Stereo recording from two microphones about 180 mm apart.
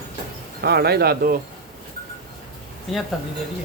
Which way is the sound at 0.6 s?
65° right (ahead or behind).